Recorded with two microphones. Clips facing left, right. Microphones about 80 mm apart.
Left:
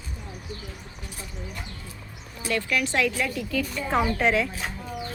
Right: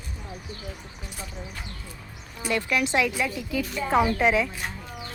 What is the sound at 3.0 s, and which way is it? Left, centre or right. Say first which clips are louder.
A woman's voice: even; centre.